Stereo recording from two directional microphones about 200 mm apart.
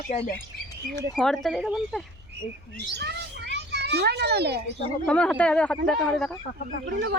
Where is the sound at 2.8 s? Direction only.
55° right (ahead or behind).